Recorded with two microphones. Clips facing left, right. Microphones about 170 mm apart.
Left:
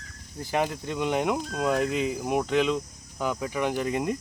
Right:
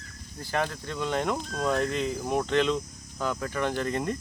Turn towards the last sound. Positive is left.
turn(degrees=10)  # may be behind; listen again after turning